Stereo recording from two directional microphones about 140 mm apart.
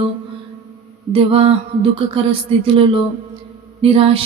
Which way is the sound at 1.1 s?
45° right (ahead or behind).